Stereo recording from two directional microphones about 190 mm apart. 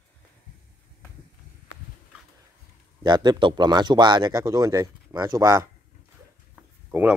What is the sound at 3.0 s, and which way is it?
Speech, 25° right (ahead or behind).